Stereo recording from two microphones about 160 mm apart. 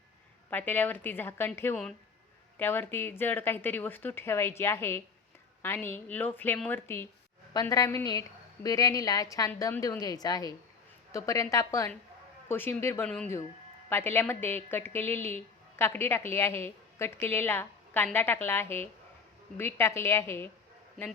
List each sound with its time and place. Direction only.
0.5 s a woman's voice: 10° left (ahead or behind)